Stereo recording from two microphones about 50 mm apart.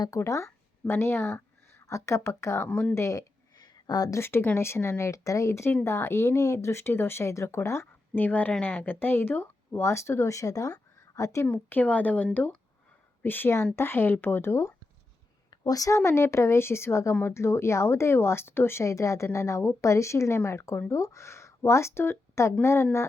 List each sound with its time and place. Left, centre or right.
0.2 s speech: left
0.9 s speech: left
1.8 s speech: left
2.6 s speech: left
2.9 s speech: left
4.2 s speech: left
7.3 s speech: left
8.1 s speech: left
9.7 s a woman's voice: left
11.5 s speech: left
13.2 s speech: left
16.0 s speech: left